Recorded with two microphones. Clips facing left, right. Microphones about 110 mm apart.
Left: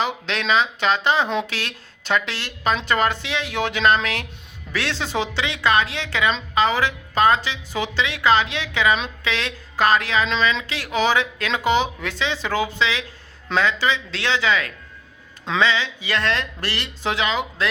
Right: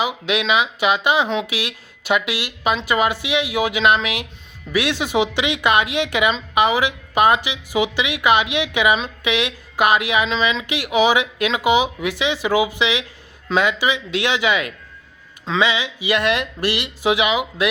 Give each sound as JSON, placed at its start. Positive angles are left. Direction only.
{"t": 0.0, "sound": "speech", "side_deg": -10}